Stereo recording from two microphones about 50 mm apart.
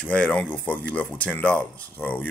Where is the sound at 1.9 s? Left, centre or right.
Left.